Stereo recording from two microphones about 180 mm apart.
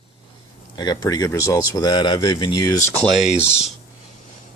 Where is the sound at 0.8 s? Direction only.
20° left (ahead or behind).